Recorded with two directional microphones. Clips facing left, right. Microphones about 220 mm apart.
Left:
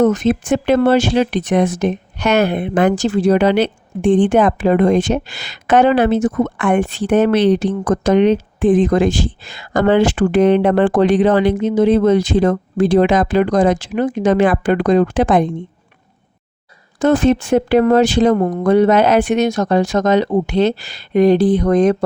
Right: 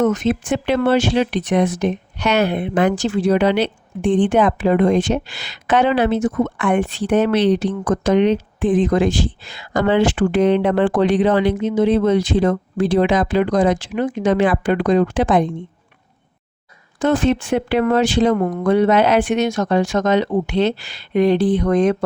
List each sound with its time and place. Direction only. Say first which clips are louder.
0.0 s speech: left 3 dB; 35° left (ahead or behind)
17.0 s speech: left 4 dB; 40° left (ahead or behind)